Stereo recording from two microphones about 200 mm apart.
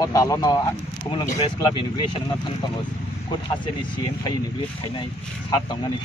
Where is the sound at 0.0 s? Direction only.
15° left (ahead or behind).